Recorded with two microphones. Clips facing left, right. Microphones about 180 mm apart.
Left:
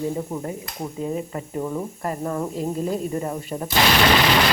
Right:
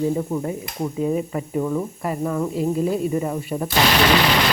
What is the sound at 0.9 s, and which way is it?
Speech, 15° right (ahead or behind).